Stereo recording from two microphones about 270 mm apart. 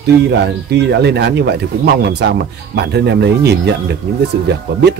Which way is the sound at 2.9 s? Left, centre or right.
Right.